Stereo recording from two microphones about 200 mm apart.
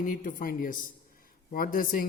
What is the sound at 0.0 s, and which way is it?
Mantra, 40° left (ahead or behind).